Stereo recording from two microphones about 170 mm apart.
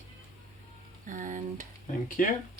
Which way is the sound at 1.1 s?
50° right (ahead or behind).